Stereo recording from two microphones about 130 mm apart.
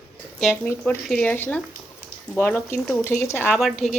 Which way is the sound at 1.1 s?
10° left (ahead or behind).